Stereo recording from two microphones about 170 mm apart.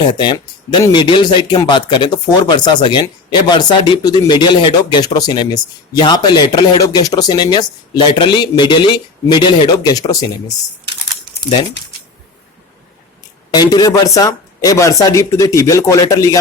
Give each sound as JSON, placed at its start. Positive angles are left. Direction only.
{"t": 0.1, "sound": "speech", "side_deg": 25}
{"t": 13.5, "sound": "speech", "side_deg": 25}